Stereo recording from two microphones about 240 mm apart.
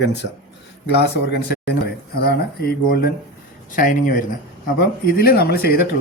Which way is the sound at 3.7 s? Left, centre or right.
Left.